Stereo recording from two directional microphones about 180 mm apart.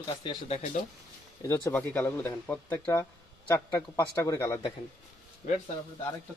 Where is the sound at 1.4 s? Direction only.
15° left (ahead or behind).